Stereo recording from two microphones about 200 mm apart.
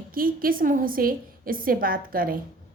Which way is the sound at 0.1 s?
45° right (ahead or behind).